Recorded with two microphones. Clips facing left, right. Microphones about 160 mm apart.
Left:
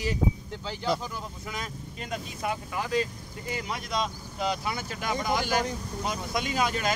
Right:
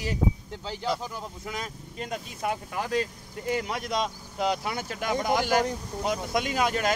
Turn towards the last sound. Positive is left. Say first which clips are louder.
# right 2 dB
turn(degrees=-65)  # may be behind; listen again after turning